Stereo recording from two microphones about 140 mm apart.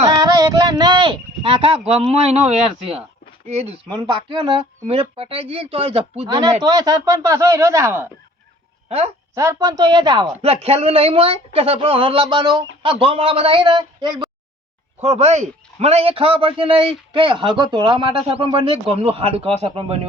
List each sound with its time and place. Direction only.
0.1 s a sound: 30° right (ahead or behind); by 1.8 s 45° right (ahead or behind)
1.9 s a man's voice: 45° right (ahead or behind)
6.6 s speech: 30° right (ahead or behind)
9.3 s speech: 20° right (ahead or behind)
10.4 s a man's voice: 45° right (ahead or behind); by 14.3 s 30° right (ahead or behind)
15.0 s a man's voice: 50° right (ahead or behind)